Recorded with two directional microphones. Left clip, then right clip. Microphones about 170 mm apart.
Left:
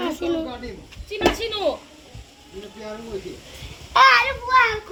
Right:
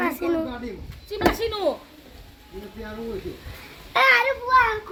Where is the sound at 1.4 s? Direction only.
85° right.